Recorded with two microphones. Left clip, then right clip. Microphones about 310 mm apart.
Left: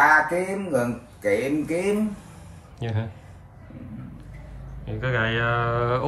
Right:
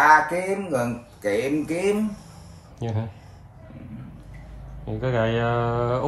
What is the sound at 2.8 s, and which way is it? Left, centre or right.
Speech, centre.